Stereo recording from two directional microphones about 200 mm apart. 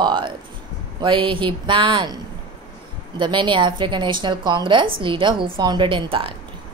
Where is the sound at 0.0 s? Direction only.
25° right (ahead or behind).